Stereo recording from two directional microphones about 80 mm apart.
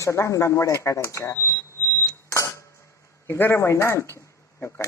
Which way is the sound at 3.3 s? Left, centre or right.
Left.